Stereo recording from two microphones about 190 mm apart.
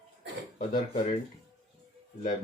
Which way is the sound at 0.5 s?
40° left (ahead or behind).